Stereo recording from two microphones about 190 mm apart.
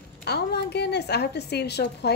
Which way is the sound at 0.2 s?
60° left (ahead or behind).